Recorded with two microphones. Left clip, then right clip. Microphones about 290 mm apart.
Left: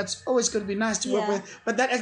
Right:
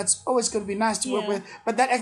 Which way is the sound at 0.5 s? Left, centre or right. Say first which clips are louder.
Right 2 dB; centre.